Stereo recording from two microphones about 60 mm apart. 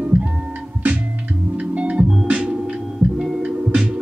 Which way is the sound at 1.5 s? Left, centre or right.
Right.